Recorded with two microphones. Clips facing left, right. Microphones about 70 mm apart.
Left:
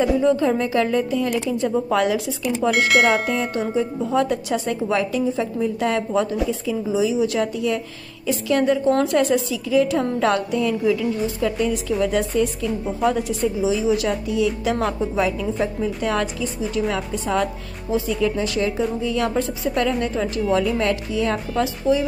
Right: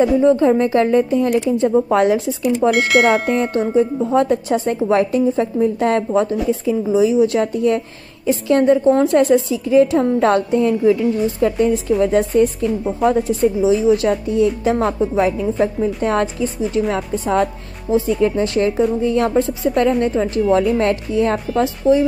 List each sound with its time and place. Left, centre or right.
0.2 s a woman's voice: right
2.7 s speech: centre
3.7 s a woman's voice: right
19.3 s a woman's voice: right
19.7 s a woman's voice: right